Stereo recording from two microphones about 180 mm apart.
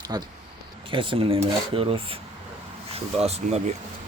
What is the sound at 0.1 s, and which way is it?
Speech, 20° right (ahead or behind).